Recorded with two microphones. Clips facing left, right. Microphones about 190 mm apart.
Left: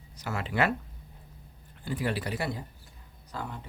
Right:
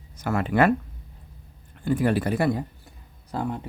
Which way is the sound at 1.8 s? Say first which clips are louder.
Right 9 dB; 50° right (ahead or behind).